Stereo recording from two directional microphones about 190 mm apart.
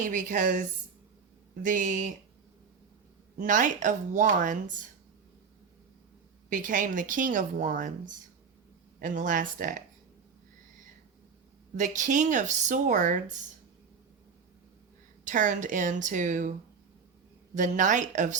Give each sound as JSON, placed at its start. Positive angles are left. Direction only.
{"t": 0.0, "sound": "a woman's voice", "side_deg": -45}
{"t": 1.6, "sound": "a woman's voice", "side_deg": -45}
{"t": 3.3, "sound": "a woman's voice", "side_deg": -45}
{"t": 6.5, "sound": "a woman's voice", "side_deg": -45}
{"t": 11.8, "sound": "speech", "side_deg": -40}
{"t": 15.2, "sound": "speech", "side_deg": -40}
{"t": 17.5, "sound": "speech", "side_deg": -40}